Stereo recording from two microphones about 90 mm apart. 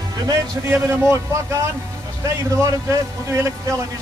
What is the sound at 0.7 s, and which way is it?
Speech, 30° right (ahead or behind).